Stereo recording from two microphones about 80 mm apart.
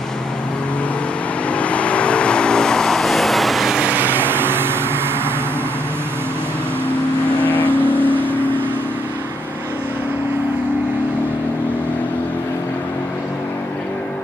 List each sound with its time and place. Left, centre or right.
1.5 s vehicle: centre
3.8 s vehicle: right
7.6 s vehicle: right